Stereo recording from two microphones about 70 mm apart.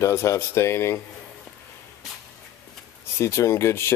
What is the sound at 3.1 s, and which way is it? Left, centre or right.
Speech, left.